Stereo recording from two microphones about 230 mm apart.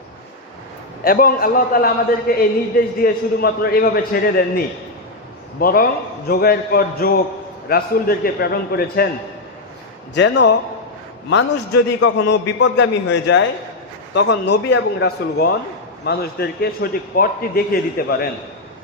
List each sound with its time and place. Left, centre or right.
1.0 s a man's voice: left
10.2 s a man's voice: left
11.9 s a man's voice: left